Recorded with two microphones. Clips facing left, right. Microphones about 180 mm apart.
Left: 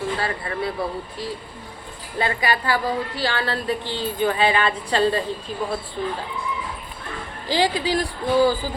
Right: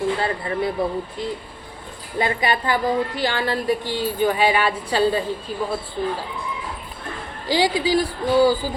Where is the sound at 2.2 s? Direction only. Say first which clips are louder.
Right 1 dB; 20° right (ahead or behind).